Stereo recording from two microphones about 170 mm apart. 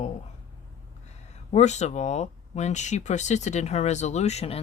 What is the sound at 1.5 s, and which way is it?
Speech, 40° left (ahead or behind).